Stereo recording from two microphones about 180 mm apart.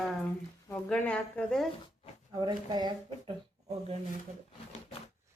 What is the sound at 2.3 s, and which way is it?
Speech, 25° right (ahead or behind).